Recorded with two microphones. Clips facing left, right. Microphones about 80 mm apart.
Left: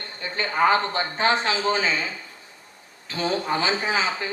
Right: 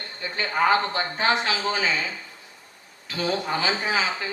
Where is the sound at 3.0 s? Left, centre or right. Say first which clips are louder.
Left 1 dB; left.